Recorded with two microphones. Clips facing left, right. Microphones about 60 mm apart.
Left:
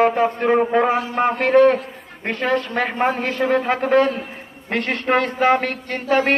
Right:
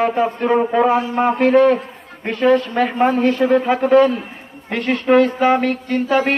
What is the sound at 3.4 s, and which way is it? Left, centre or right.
Speech, centre.